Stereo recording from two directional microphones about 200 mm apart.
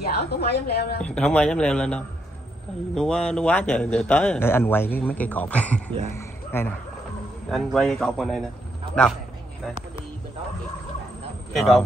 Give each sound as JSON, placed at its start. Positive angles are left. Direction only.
{"t": 0.0, "sound": "a woman's voice", "side_deg": 55}
{"t": 1.0, "sound": "a man's voice", "side_deg": 5}
{"t": 6.1, "sound": "a sound", "side_deg": 10}
{"t": 7.5, "sound": "speech", "side_deg": 0}
{"t": 11.5, "sound": "a man's voice", "side_deg": 0}